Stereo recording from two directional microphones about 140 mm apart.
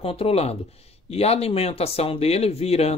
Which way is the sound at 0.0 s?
45° left (ahead or behind).